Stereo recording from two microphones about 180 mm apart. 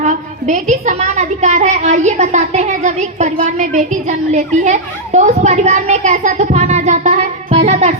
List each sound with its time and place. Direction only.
0.0 s a woman's voice: 45° right (ahead or behind)